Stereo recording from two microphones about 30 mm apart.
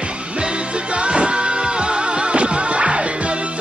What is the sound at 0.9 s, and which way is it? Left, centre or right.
Music, right.